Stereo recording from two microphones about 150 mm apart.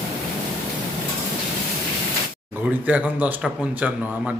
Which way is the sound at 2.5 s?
10° right (ahead or behind).